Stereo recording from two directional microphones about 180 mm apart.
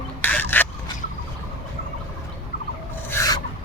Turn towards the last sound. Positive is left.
turn(degrees=15)  # may be behind; listen again after turning